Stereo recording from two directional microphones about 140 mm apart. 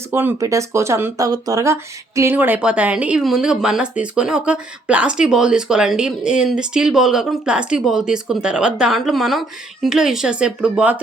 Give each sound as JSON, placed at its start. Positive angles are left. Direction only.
{"t": 0.1, "sound": "speech", "side_deg": -15}